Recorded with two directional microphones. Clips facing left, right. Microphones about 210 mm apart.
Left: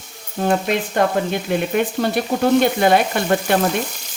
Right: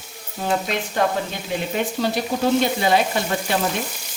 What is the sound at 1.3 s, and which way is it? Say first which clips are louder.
Speech: left 6 dB; 55° left (ahead or behind).